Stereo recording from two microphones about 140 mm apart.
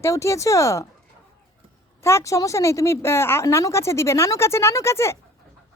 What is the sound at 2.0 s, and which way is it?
A woman's voice, 20° left (ahead or behind).